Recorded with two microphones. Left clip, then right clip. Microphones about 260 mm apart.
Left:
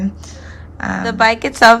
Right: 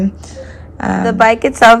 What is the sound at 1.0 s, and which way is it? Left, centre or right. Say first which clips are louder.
Speech: right 4 dB; centre.